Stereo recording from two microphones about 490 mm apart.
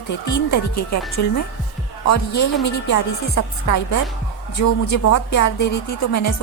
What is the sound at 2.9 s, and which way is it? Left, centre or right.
Speech, left.